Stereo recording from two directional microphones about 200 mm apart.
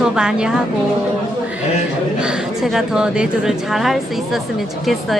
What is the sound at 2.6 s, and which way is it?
Speech, centre (ahead or behind).